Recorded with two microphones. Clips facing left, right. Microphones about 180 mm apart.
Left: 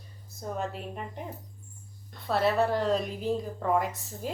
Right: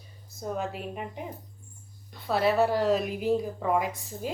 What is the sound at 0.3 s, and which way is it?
Speech, centre (ahead or behind).